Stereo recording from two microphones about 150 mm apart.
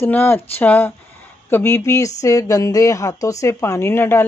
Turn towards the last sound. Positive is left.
turn(degrees=15)  # may be behind; listen again after turning